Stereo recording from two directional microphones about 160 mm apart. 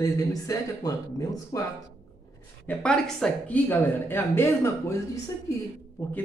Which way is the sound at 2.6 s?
10° left (ahead or behind).